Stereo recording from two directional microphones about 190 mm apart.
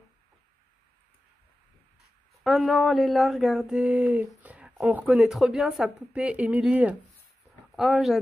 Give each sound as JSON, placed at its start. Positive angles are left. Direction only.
{"t": 2.4, "sound": "speech", "side_deg": 0}